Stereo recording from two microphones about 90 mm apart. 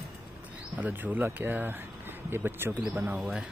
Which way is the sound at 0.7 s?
15° right (ahead or behind).